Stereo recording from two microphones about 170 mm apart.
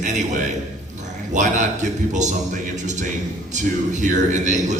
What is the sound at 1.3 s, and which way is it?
A man's voice, 45° right (ahead or behind).